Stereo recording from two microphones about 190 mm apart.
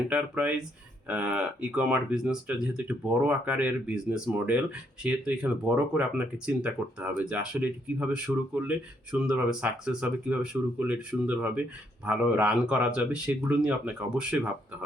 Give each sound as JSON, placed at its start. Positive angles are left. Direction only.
{"t": 0.1, "sound": "speech", "side_deg": -5}